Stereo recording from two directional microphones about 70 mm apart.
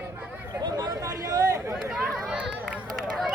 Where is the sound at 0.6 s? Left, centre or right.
Right.